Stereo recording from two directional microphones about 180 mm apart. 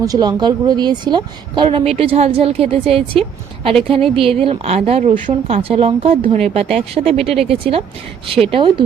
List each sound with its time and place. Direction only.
0.0 s speech: 20° right (ahead or behind)